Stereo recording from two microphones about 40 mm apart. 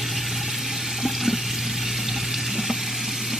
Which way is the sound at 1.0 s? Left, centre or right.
Centre.